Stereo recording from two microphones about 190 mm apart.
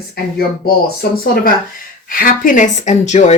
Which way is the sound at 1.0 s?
55° left (ahead or behind).